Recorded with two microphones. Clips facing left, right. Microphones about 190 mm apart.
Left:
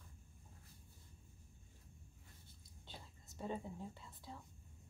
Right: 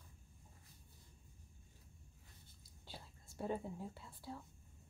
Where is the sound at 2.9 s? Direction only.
10° right (ahead or behind).